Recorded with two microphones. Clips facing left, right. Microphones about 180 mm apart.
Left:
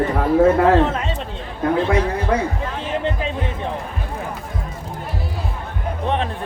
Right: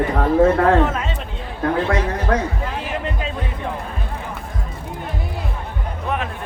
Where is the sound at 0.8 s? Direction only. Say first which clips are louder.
Left 1 dB; 30° left (ahead or behind).